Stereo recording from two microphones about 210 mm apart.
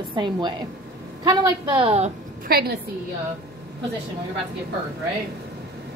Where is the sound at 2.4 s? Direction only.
45° right (ahead or behind).